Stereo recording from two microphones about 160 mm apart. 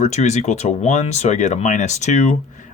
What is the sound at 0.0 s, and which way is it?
Speech, 45° left (ahead or behind).